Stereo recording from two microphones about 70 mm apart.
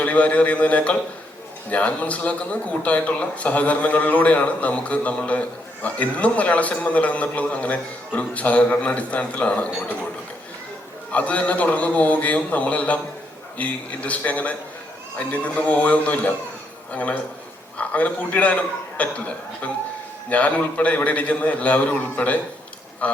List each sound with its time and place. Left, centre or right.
0.0 s a man's voice: left
11.1 s a man's voice: centre